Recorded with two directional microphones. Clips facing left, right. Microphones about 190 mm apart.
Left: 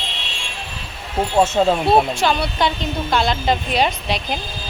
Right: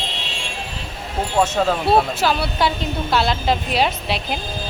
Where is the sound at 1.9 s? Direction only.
5° right (ahead or behind).